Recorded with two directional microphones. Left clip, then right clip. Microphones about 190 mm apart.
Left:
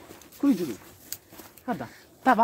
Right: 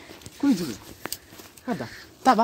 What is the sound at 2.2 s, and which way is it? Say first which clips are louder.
Speech: right 2 dB; 55° right (ahead or behind).